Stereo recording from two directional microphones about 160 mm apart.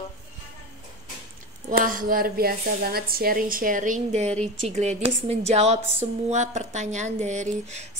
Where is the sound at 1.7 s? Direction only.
60° right (ahead or behind).